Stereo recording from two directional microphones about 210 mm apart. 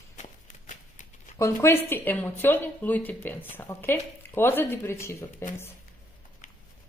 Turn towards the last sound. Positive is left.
turn(degrees=15)  # may be behind; listen again after turning